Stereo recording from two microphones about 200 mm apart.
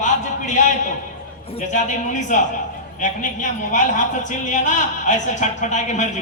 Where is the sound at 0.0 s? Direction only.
40° left (ahead or behind).